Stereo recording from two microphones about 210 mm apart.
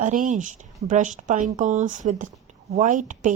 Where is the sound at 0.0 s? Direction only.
35° right (ahead or behind).